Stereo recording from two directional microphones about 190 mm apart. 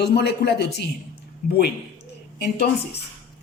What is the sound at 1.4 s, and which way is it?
Speech, 45° left (ahead or behind).